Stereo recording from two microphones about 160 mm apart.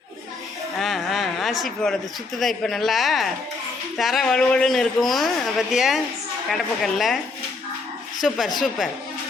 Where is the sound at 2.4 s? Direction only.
Centre (ahead or behind).